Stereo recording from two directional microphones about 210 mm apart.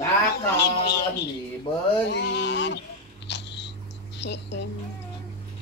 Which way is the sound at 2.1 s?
55° left (ahead or behind).